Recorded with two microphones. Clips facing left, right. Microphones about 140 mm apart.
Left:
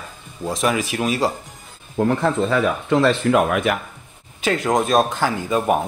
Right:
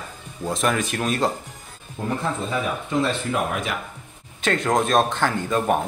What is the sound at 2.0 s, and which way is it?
Speech, 80° left.